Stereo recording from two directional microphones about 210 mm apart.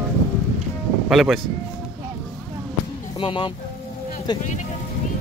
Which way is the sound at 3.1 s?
25° left (ahead or behind).